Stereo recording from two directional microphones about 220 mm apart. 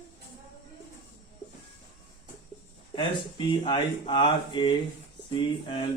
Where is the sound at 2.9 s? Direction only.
20° left (ahead or behind).